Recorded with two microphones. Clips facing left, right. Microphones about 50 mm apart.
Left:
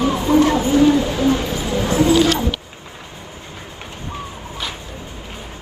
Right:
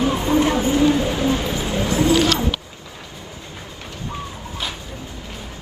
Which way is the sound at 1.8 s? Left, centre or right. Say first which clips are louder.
Left 3 dB; left.